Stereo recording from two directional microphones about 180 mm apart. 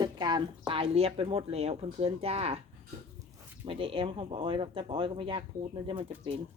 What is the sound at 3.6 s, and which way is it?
Speech, 30° right (ahead or behind).